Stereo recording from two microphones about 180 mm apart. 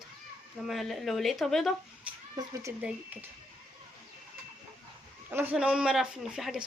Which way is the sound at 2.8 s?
5° right (ahead or behind).